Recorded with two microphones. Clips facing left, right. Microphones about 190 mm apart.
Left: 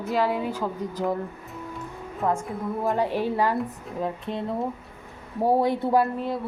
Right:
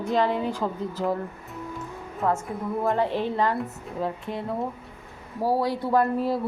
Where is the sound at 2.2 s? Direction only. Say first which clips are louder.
Even; 15° left (ahead or behind).